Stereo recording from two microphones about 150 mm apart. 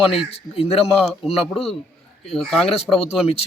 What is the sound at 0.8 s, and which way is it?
A man's voice, 5° right (ahead or behind).